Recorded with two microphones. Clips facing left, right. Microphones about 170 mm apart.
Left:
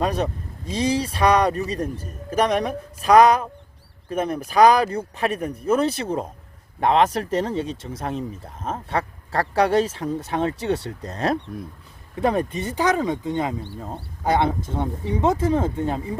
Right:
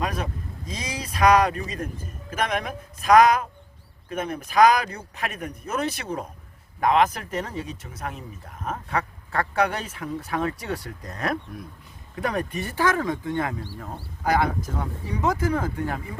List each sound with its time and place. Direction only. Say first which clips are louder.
0.0 s speech: left 5 dB; 30° left (ahead or behind)